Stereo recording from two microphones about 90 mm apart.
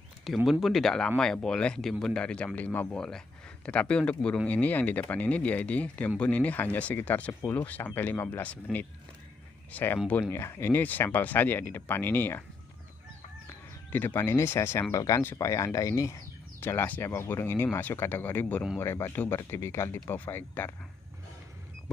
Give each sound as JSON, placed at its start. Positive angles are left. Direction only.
{"t": 0.5, "sound": "speech", "side_deg": 0}
{"t": 9.7, "sound": "speech", "side_deg": 20}
{"t": 10.3, "sound": "speech", "side_deg": 30}
{"t": 13.9, "sound": "speech", "side_deg": 20}
{"t": 16.5, "sound": "speech", "side_deg": 25}